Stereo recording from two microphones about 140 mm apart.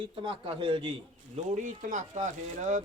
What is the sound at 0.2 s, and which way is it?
Speech, 35° right (ahead or behind).